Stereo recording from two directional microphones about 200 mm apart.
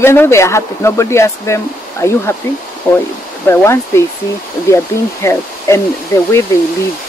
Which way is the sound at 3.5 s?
15° left (ahead or behind).